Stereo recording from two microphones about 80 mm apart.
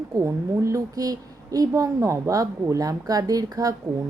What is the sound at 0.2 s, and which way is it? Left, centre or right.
A woman's voice, right.